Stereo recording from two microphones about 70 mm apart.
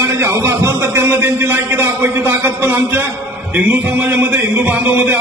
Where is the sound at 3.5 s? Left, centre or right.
Right.